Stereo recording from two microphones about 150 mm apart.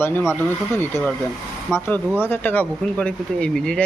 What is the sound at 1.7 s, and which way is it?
Speech, 5° right (ahead or behind).